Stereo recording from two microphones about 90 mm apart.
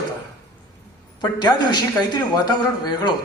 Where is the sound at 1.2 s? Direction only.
50° left (ahead or behind).